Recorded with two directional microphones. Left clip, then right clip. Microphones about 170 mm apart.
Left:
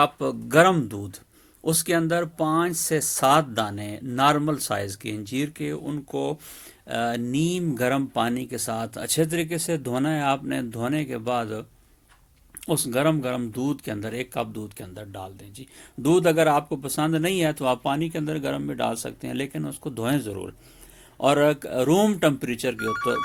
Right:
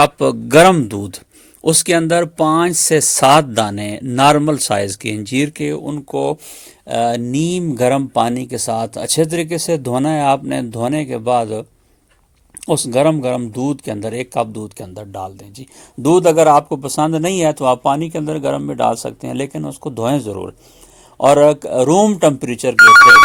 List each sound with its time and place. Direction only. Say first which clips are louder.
0.0 s speech: right 10 dB; 50° right (ahead or behind)
5.8 s speech: right 8 dB; 30° right (ahead or behind)
12.6 s speech: right 9 dB; 30° right (ahead or behind)